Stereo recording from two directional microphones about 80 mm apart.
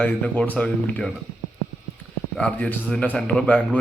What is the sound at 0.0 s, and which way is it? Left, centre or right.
A man's voice, centre.